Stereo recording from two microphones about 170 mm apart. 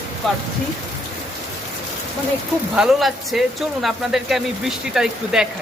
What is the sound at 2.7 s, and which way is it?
Speech, 5° right (ahead or behind).